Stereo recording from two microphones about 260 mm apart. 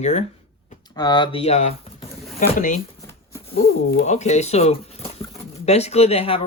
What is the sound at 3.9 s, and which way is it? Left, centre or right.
Speech, left.